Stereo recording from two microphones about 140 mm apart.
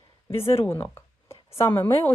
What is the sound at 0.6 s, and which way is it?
Speech, 15° left (ahead or behind).